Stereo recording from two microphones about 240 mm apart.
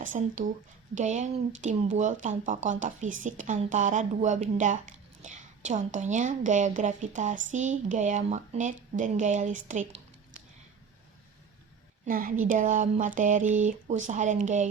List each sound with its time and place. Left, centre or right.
0.1 s a woman's voice: right
12.0 s a woman's voice: right